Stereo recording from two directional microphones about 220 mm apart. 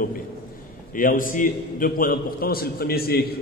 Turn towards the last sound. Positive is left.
turn(degrees=45)  # may be behind; listen again after turning